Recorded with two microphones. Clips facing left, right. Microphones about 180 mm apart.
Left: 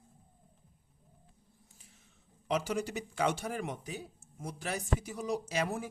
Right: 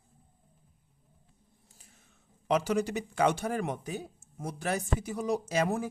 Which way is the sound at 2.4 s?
65° right (ahead or behind).